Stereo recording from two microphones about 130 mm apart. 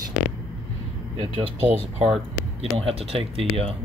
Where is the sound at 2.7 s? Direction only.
50° right (ahead or behind).